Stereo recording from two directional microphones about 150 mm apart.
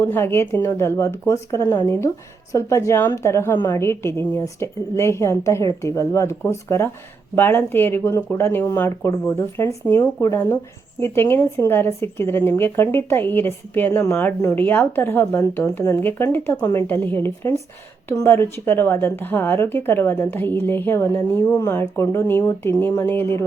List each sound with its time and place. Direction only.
0.0 s a woman's voice: 15° left (ahead or behind)
16.6 s a woman's voice: 25° left (ahead or behind)
16.8 s speech: 15° left (ahead or behind)